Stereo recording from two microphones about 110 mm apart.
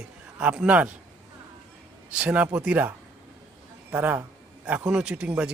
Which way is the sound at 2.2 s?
10° right (ahead or behind).